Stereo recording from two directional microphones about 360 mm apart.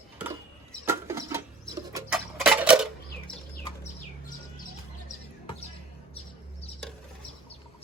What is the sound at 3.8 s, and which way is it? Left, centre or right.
Bird, left.